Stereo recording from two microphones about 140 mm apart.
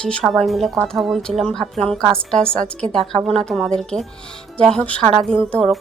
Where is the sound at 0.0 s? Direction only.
5° left (ahead or behind).